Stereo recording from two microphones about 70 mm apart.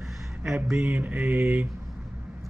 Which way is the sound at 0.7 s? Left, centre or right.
Right.